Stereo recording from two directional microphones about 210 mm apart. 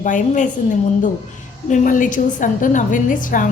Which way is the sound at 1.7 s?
40° left (ahead or behind).